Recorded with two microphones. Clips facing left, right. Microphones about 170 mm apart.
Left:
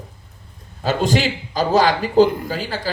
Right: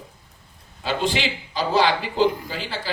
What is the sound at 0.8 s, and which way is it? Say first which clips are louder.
A man's voice: left 5 dB; 45° left (ahead or behind).